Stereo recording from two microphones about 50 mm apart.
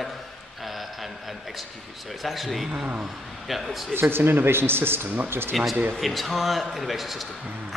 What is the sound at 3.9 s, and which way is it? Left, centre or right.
Speech, right.